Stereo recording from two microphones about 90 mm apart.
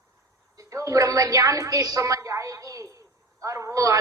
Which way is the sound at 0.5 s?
35° right (ahead or behind).